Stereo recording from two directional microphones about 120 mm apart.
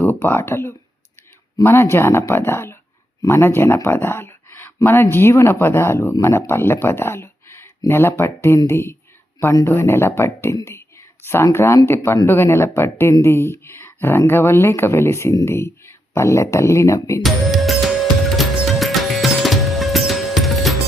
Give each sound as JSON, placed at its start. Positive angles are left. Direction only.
{"t": 0.0, "sound": "speech", "side_deg": 20}
{"t": 17.2, "sound": "music", "side_deg": 0}